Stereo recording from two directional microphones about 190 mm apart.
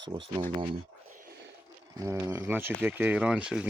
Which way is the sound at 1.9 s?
15° right (ahead or behind).